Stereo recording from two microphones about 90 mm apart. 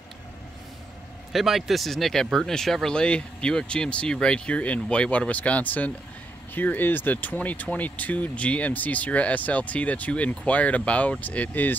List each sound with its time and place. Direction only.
1.3 s speech: centre (ahead or behind); by 11.7 s 20° left (ahead or behind)